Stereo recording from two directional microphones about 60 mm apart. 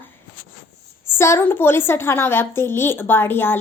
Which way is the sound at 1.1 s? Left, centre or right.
Left.